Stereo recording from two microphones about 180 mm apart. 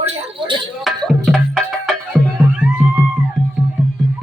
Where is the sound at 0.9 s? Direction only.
Centre (ahead or behind).